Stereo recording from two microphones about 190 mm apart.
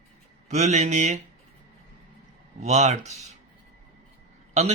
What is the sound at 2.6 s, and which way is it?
Speech, 35° right (ahead or behind).